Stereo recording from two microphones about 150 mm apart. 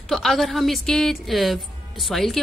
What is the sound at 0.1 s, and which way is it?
A woman's voice, centre (ahead or behind).